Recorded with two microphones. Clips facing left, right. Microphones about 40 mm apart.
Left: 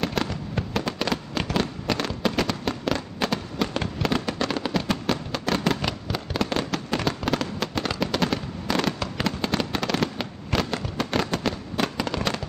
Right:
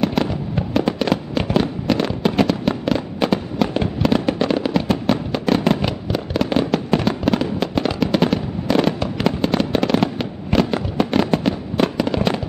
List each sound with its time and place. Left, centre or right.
0.0 s fireworks: centre